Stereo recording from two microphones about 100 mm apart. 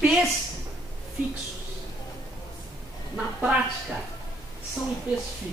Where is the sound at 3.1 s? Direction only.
10° right (ahead or behind).